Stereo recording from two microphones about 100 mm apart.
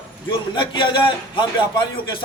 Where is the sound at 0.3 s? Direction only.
55° left (ahead or behind).